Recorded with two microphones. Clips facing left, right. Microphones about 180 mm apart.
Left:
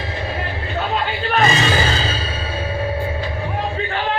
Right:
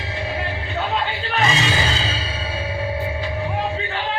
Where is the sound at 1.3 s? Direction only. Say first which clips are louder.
Left 4 dB; 60° left (ahead or behind).